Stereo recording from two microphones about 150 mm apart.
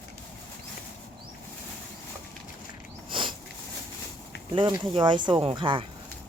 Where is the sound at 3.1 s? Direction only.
35° right (ahead or behind).